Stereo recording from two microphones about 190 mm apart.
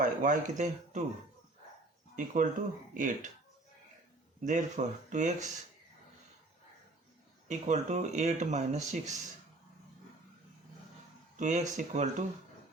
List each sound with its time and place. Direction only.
0.0 s speech: 45° right (ahead or behind)
2.1 s speech: 40° right (ahead or behind)
4.4 s speech: 40° right (ahead or behind)
7.4 s speech: 40° right (ahead or behind)
11.3 s speech: 40° right (ahead or behind)